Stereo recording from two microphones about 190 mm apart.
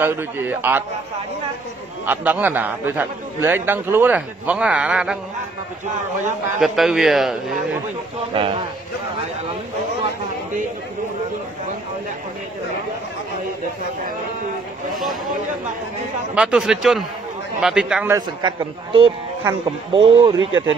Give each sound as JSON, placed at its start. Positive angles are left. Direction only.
{"t": 0.0, "sound": "a man's voice", "side_deg": -10}
{"t": 2.0, "sound": "a man's voice", "side_deg": -10}
{"t": 6.6, "sound": "a man's voice", "side_deg": 0}
{"t": 8.3, "sound": "speech", "side_deg": -30}
{"t": 16.3, "sound": "a man's voice", "side_deg": -5}
{"t": 19.6, "sound": "speech", "side_deg": -25}
{"t": 20.3, "sound": "speech", "side_deg": -90}